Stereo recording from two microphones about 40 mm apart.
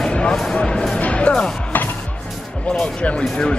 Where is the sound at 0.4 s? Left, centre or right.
Centre.